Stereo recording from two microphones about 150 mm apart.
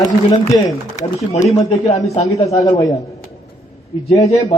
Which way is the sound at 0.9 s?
50° left (ahead or behind).